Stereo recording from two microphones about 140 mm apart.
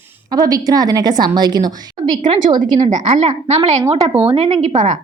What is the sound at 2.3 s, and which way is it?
Speech, 45° right (ahead or behind).